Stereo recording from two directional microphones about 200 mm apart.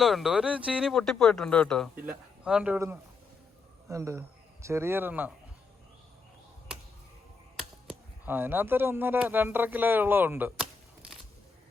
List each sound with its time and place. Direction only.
0.0 s speech: centre (ahead or behind)
7.9 s speech: 10° right (ahead or behind)